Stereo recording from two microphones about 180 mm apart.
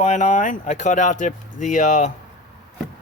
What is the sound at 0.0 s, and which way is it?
Speech, 40° left (ahead or behind).